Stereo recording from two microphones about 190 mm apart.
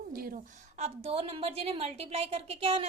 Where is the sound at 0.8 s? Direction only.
30° right (ahead or behind).